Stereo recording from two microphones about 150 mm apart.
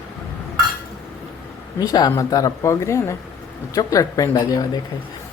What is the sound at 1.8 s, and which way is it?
Speech, 25° left (ahead or behind).